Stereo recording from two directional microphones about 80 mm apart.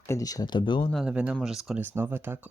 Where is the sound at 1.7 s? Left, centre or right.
Right.